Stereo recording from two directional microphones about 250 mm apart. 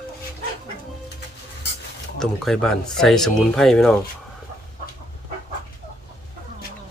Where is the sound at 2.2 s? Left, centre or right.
Centre.